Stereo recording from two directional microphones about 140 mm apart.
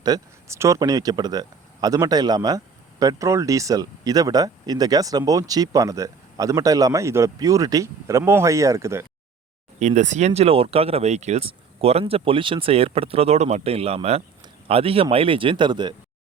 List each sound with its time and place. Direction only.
0.0 s speech: 25° right (ahead or behind)
9.8 s speech: 60° right (ahead or behind); by 16.0 s 35° right (ahead or behind)